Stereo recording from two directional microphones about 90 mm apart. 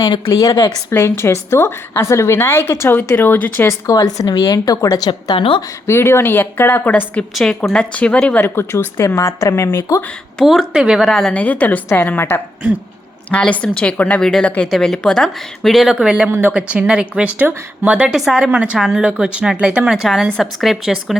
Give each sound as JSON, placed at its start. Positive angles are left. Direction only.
{"t": 0.3, "sound": "speech", "side_deg": 45}
{"t": 0.9, "sound": "a woman's voice", "side_deg": 30}
{"t": 3.9, "sound": "speech", "side_deg": 45}
{"t": 5.4, "sound": "speech", "side_deg": 90}
{"t": 5.8, "sound": "a woman's voice", "side_deg": 30}
{"t": 7.3, "sound": "speech", "side_deg": 0}
{"t": 8.4, "sound": "a woman's voice", "side_deg": 25}
{"t": 10.4, "sound": "speech", "side_deg": 0}
{"t": 11.4, "sound": "a woman's voice", "side_deg": 15}
{"t": 16.3, "sound": "speech", "side_deg": -20}